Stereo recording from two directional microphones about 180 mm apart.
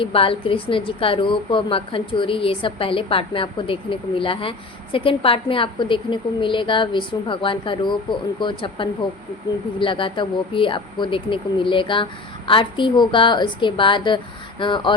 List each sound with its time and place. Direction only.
0.0 s a woman's voice: 30° left (ahead or behind)